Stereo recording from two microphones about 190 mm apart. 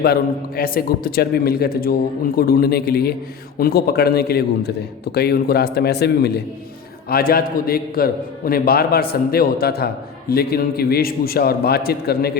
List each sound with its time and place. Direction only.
0.0 s a man's voice: 55° left (ahead or behind)